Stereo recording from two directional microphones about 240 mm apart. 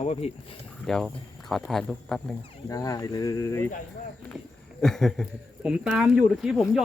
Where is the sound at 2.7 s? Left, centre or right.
Centre.